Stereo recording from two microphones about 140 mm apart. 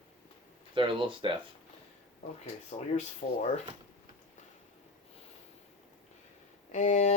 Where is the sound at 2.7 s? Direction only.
45° left (ahead or behind).